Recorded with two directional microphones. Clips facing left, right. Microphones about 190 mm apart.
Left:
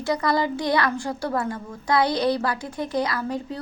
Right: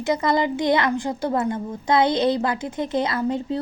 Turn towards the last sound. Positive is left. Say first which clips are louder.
# right 4 dB
turn(degrees=-25)  # may be behind; listen again after turning